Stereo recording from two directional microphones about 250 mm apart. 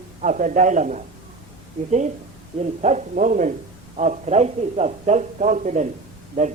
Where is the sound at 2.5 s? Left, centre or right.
Right.